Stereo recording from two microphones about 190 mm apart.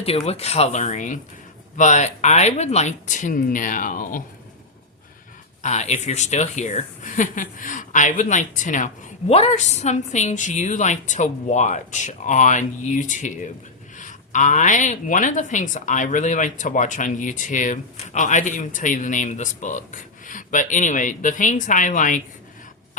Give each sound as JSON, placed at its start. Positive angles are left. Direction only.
{"t": 0.0, "sound": "speech", "side_deg": 30}
{"t": 5.6, "sound": "speech", "side_deg": 35}